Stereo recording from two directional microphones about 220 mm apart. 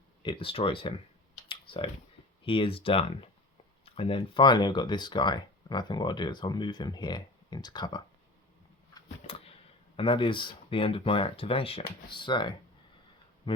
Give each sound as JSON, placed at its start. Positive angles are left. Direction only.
{"t": 0.2, "sound": "speech", "side_deg": 20}
{"t": 1.5, "sound": "computer keyboard", "side_deg": 25}
{"t": 2.4, "sound": "speech", "side_deg": 25}
{"t": 9.0, "sound": "a sound", "side_deg": 25}
{"t": 10.0, "sound": "speech", "side_deg": 25}